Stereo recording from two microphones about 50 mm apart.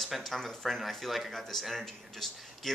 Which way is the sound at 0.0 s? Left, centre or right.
Centre.